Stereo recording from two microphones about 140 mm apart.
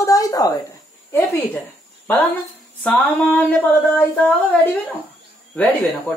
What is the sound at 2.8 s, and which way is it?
Speech, 10° left (ahead or behind).